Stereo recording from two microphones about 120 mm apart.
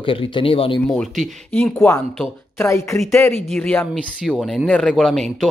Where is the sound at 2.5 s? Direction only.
25° left (ahead or behind).